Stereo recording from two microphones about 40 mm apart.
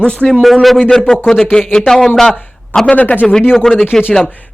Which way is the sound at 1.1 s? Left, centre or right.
Left.